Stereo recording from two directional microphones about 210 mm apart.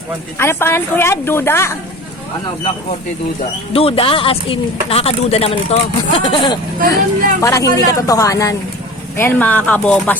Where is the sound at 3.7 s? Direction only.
25° left (ahead or behind).